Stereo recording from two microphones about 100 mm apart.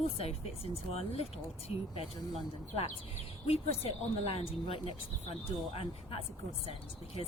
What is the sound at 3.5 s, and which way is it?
Speech, 75° left (ahead or behind).